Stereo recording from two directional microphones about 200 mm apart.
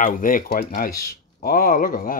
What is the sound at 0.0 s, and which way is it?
Speech, 45° left (ahead or behind).